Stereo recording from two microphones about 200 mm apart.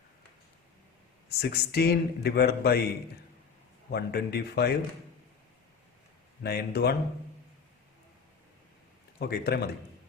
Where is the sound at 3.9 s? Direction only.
50° left (ahead or behind).